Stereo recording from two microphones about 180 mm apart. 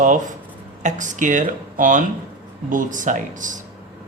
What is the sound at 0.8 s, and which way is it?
A man's voice, 45° right (ahead or behind).